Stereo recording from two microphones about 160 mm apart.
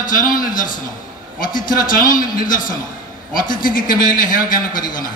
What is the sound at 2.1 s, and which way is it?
A man's voice, 60° left (ahead or behind).